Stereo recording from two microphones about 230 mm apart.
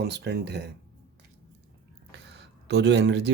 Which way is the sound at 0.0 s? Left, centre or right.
Right.